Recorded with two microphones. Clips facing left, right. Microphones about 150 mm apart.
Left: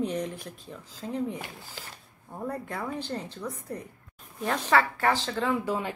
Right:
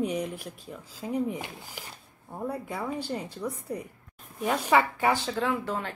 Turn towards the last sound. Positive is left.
turn(degrees=10)  # may be behind; listen again after turning